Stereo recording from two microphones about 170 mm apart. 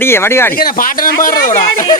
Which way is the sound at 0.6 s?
55° left (ahead or behind).